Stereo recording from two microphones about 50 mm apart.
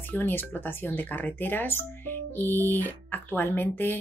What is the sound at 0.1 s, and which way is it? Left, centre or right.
A woman's voice, left.